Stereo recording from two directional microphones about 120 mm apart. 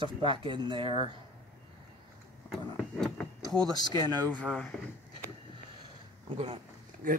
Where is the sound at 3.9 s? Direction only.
35° right (ahead or behind).